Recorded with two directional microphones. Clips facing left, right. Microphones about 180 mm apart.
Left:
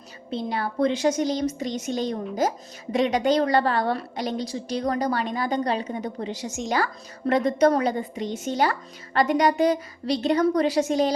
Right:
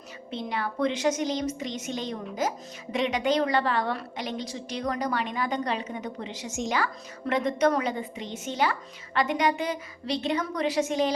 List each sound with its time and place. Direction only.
0.3 s a woman's voice: 35° left (ahead or behind)